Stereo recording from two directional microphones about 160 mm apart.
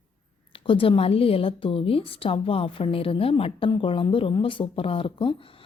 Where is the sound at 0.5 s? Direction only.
35° left (ahead or behind).